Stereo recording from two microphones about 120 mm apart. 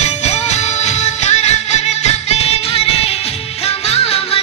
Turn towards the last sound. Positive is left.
turn(degrees=55)  # may be behind; listen again after turning